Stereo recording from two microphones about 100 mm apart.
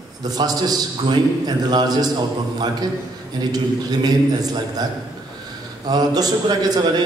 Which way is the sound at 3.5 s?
40° right (ahead or behind).